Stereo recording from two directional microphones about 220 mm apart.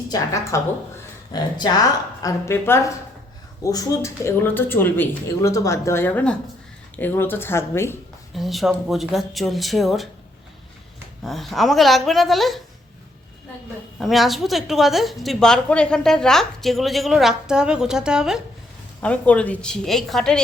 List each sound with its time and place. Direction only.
0.1 s speech: 15° left (ahead or behind)
8.4 s a woman's voice: centre (ahead or behind)
11.2 s a woman's voice: centre (ahead or behind)
14.0 s a woman's voice: centre (ahead or behind)